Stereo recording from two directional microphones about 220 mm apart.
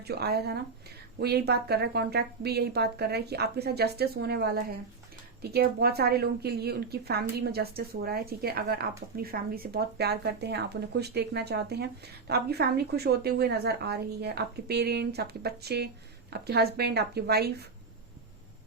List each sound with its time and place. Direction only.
0.0 s a woman's voice: 45° right (ahead or behind)